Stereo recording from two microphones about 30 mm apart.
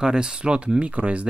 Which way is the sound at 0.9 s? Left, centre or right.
Right.